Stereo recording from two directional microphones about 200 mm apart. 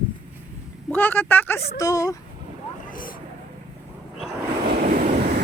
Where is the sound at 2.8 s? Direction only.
45° left (ahead or behind).